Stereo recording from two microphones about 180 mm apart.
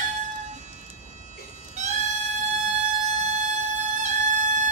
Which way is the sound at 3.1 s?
40° right (ahead or behind).